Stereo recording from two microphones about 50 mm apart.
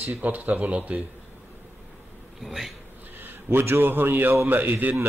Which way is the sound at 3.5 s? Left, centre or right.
Right.